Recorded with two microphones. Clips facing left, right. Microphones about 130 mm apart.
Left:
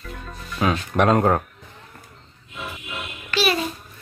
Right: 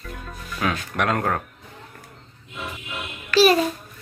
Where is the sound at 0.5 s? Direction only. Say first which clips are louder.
Left 4 dB; 25° left (ahead or behind).